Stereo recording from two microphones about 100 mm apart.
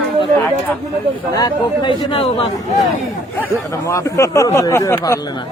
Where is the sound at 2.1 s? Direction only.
65° left (ahead or behind).